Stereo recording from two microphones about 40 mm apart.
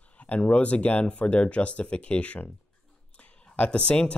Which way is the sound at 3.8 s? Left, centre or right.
Left.